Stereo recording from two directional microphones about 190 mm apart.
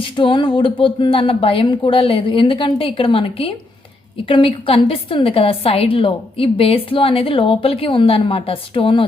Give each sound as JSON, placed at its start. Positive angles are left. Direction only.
{"t": 0.0, "sound": "a woman's voice", "side_deg": 25}